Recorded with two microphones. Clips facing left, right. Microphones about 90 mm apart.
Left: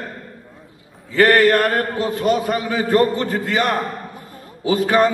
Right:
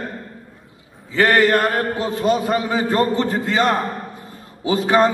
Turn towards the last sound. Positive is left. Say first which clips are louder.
# even
turn(degrees=-20)  # may be behind; listen again after turning